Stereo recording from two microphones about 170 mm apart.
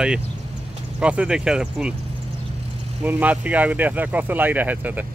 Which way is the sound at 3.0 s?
10° right (ahead or behind).